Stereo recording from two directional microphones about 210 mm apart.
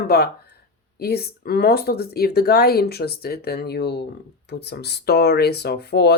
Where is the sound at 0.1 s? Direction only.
50° left (ahead or behind).